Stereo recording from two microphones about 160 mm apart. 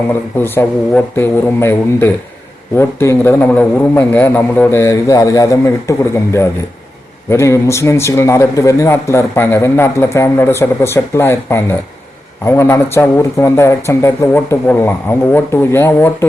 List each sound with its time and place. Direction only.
0.3 s a man's voice: 15° left (ahead or behind)